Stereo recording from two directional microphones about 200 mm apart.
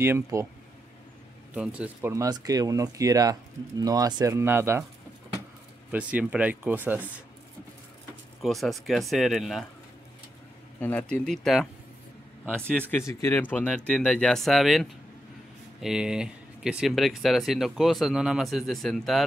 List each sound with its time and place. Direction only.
0.0 s speech: 15° right (ahead or behind)
1.5 s speech: 5° right (ahead or behind)
5.9 s speech: 5° right (ahead or behind)
8.4 s speech: centre (ahead or behind)
10.8 s speech: 5° left (ahead or behind)
12.9 s speech: 10° left (ahead or behind)